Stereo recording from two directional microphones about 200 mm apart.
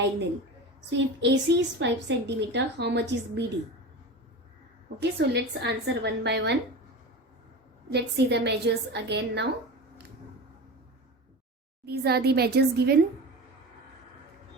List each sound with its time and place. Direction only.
0.9 s a woman's voice: 60° right (ahead or behind)
4.9 s a woman's voice: 55° right (ahead or behind)
7.9 s a woman's voice: 55° right (ahead or behind)
11.9 s a woman's voice: 55° right (ahead or behind)